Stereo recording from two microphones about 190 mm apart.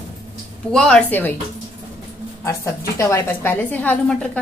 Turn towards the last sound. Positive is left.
turn(degrees=5)  # may be behind; listen again after turning